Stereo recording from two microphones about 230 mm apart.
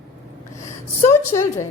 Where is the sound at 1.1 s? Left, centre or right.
Centre.